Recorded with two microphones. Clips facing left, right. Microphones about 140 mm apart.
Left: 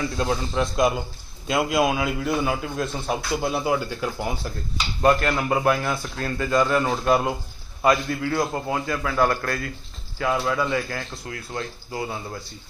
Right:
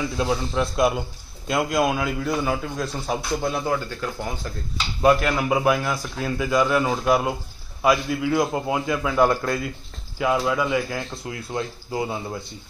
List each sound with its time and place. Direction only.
0.0 s a man's voice: 5° right (ahead or behind)
5.0 s a man's voice: 5° right (ahead or behind)